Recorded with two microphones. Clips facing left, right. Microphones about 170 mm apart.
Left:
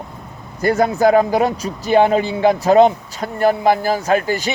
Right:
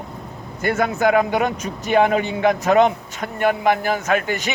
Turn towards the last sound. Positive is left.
turn(degrees=35)  # may be behind; listen again after turning